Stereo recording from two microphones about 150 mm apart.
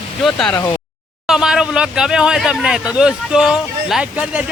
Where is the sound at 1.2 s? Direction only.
5° right (ahead or behind).